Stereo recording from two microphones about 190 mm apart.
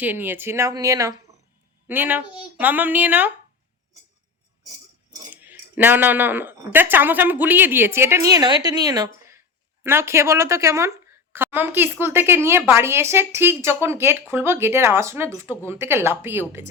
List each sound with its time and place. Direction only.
0.0 s a woman's voice: 10° right (ahead or behind)
5.3 s a woman's voice: 10° right (ahead or behind)